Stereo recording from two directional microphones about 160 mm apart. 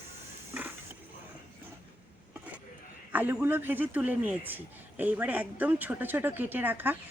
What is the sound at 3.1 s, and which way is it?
A man's voice, 10° right (ahead or behind).